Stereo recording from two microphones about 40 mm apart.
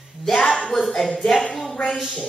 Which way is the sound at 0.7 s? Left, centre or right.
Centre.